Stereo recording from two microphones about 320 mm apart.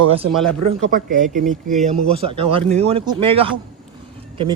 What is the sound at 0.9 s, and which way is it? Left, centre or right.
Speech, right.